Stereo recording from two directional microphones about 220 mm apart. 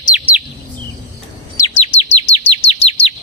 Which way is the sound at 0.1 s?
5° right (ahead or behind).